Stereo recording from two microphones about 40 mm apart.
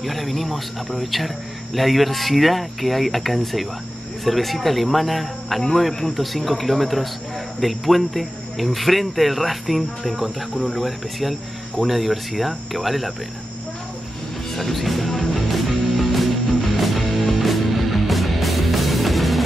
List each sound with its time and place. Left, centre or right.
0.0 s a man's voice: centre
14.5 s music: centre